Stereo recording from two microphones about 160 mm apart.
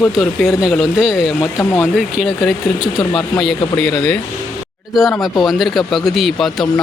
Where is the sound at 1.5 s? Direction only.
15° left (ahead or behind).